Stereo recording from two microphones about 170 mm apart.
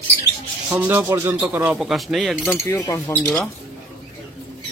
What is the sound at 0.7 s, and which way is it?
Speech, 10° right (ahead or behind).